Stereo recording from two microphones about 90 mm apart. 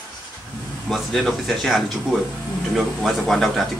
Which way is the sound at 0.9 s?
Centre (ahead or behind).